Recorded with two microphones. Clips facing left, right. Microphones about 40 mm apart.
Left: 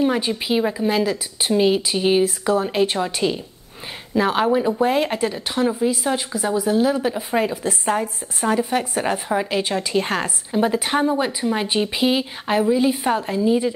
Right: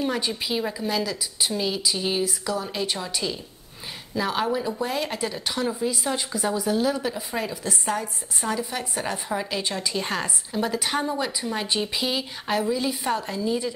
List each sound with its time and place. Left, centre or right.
0.0 s a woman's voice: left
5.3 s a woman's voice: centre